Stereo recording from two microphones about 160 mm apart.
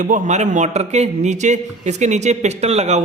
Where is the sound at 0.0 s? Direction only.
50° right (ahead or behind).